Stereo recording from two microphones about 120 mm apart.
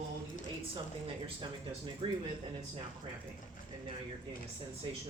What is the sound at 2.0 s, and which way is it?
Speech, 45° right (ahead or behind).